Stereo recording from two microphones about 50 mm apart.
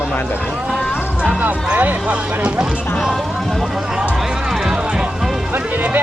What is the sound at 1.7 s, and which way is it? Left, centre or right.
Speech, right.